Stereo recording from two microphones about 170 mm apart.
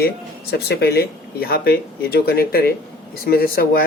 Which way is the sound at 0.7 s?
70° left (ahead or behind).